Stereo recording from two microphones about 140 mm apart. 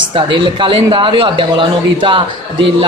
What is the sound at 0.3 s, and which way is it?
Speech, 35° right (ahead or behind).